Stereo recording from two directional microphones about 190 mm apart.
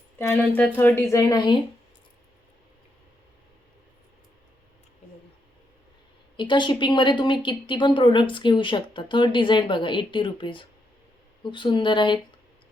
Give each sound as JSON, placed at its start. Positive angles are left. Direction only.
{"t": 0.2, "sound": "a woman's voice", "side_deg": 10}
{"t": 6.3, "sound": "a woman's voice", "side_deg": 25}